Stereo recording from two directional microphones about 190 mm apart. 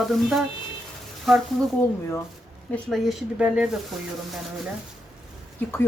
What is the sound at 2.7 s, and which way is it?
Speech, centre (ahead or behind).